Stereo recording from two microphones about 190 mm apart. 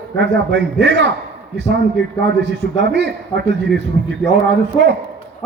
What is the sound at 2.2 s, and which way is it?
A man's voice, 65° right (ahead or behind).